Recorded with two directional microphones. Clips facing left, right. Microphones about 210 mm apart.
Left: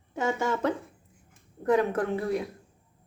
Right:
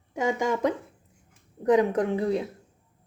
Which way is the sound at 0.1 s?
15° right (ahead or behind).